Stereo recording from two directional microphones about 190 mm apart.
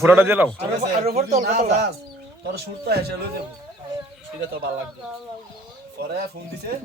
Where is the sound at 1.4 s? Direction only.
55° right (ahead or behind).